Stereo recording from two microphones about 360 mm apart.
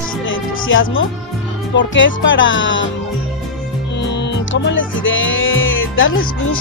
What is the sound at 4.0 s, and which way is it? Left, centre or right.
Music, left.